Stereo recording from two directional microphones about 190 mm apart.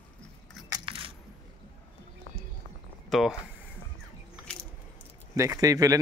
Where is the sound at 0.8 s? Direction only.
30° right (ahead or behind).